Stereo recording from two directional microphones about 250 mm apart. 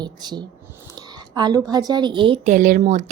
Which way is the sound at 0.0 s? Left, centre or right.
Centre.